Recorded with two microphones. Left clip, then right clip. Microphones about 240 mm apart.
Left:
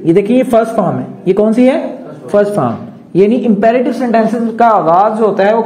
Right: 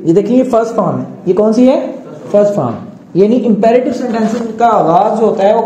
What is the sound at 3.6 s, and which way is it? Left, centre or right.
A man's voice, left.